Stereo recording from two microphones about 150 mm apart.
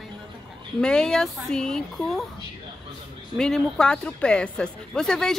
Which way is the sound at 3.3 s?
Centre (ahead or behind).